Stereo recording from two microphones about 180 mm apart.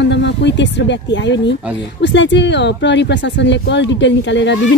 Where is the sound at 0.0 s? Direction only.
75° left (ahead or behind).